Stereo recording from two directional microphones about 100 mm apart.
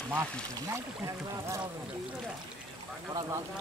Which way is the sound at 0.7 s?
30° right (ahead or behind).